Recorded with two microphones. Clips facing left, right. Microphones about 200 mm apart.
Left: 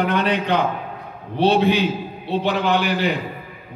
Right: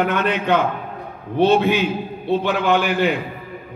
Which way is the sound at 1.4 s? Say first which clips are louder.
Right 1 dB; 55° right (ahead or behind).